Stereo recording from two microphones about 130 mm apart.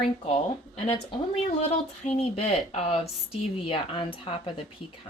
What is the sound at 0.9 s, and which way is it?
A woman's voice, 45° left (ahead or behind).